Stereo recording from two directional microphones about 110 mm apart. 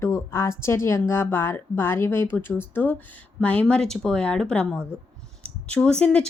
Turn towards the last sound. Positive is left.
turn(degrees=5)  # may be behind; listen again after turning